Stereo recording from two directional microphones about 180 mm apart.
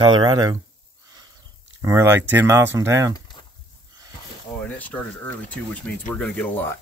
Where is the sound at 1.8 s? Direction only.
15° right (ahead or behind).